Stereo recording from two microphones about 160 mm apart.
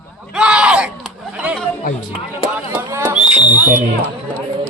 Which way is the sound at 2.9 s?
15° right (ahead or behind).